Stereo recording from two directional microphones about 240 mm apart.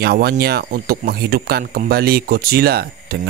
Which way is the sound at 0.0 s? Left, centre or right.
Right.